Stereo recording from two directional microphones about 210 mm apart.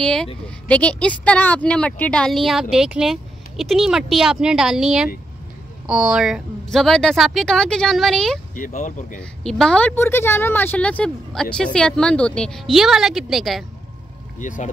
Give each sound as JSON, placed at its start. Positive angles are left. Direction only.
{"t": 0.0, "sound": "a woman's voice", "side_deg": 5}
{"t": 8.5, "sound": "speech", "side_deg": 40}
{"t": 9.2, "sound": "a woman's voice", "side_deg": 0}
{"t": 14.4, "sound": "speech", "side_deg": 35}